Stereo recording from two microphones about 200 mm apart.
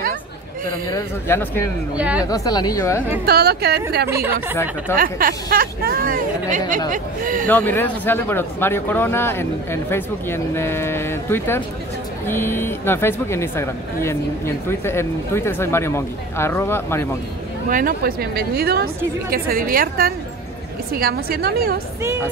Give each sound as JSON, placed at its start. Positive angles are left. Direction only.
{"t": 0.8, "sound": "speech", "side_deg": 15}
{"t": 2.0, "sound": "speech", "side_deg": -5}
{"t": 2.2, "sound": "speech", "side_deg": 20}
{"t": 3.3, "sound": "speech", "side_deg": -55}
{"t": 4.1, "sound": "speech", "side_deg": -15}
{"t": 4.9, "sound": "speech", "side_deg": -45}
{"t": 7.4, "sound": "speech", "side_deg": 10}
{"t": 17.6, "sound": "speech", "side_deg": -45}